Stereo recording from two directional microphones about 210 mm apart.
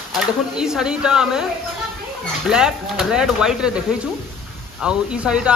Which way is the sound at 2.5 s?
5° right (ahead or behind).